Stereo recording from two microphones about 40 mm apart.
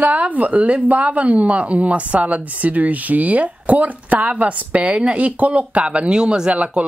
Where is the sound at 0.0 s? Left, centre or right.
Right.